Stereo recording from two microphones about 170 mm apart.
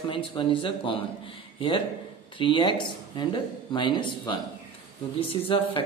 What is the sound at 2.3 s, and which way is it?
Speech, 30° left (ahead or behind).